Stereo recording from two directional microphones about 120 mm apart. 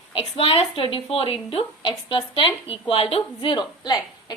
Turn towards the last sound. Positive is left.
turn(degrees=35)  # may be behind; listen again after turning